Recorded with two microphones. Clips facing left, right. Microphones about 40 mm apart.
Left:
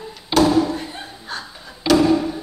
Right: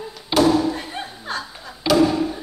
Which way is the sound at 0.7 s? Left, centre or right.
Right.